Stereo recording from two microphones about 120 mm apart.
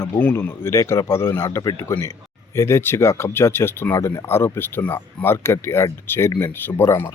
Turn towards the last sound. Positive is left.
turn(degrees=20)  # may be behind; listen again after turning